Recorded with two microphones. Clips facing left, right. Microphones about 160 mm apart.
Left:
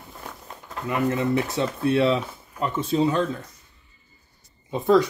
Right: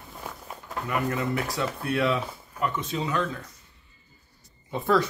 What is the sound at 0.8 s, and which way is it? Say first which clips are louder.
Speech: left 5 dB; 25° left (ahead or behind).